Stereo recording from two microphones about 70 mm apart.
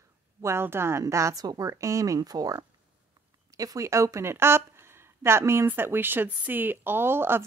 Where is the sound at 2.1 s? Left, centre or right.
Right.